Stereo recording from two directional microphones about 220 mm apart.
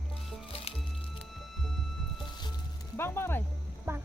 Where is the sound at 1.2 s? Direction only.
Centre (ahead or behind).